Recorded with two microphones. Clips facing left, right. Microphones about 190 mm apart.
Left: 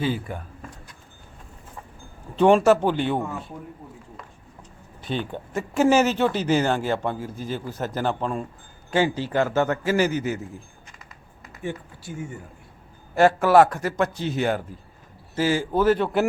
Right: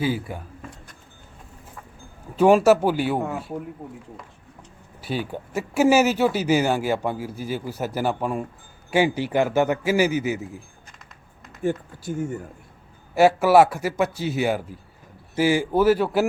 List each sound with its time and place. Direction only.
0.0 s speech: 5° right (ahead or behind)
2.3 s speech: 5° right (ahead or behind)
4.9 s speech: 5° right (ahead or behind)
11.6 s speech: 45° right (ahead or behind)
13.1 s speech: 10° right (ahead or behind)